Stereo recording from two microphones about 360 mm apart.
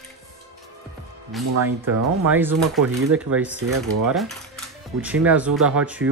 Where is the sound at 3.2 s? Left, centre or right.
Centre.